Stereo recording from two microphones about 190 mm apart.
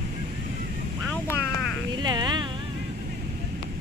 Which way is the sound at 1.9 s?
20° right (ahead or behind).